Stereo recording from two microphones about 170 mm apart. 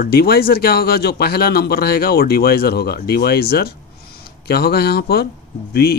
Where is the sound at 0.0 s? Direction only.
65° left (ahead or behind).